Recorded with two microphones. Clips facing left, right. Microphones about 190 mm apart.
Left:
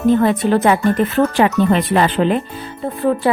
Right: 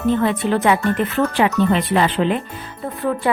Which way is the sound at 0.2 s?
40° left (ahead or behind).